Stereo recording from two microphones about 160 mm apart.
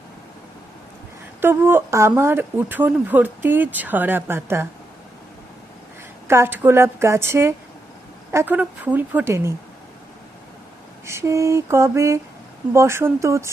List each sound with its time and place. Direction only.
1.4 s speech: 15° right (ahead or behind)
6.2 s speech: 15° right (ahead or behind)
11.0 s speech: 15° right (ahead or behind)